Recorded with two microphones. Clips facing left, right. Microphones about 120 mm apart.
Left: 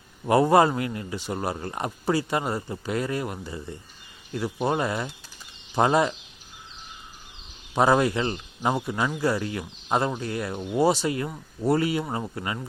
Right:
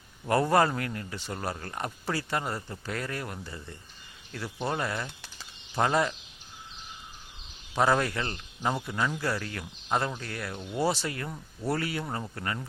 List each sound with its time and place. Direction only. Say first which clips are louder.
0.3 s speech: left 5 dB; 15° left (ahead or behind)
7.8 s speech: left 5 dB; 15° left (ahead or behind)